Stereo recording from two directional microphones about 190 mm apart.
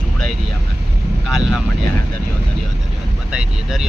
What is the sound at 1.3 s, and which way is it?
Speech, centre (ahead or behind).